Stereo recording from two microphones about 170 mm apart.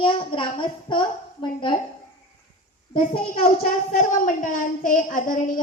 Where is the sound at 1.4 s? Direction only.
30° left (ahead or behind).